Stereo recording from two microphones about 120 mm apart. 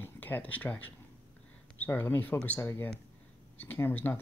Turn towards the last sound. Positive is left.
turn(degrees=15)  # may be behind; listen again after turning